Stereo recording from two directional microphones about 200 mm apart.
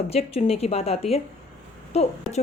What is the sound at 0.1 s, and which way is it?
A woman's voice, 30° left (ahead or behind).